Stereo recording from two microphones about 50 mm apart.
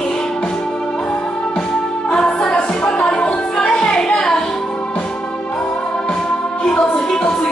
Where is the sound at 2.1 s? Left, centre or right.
Centre.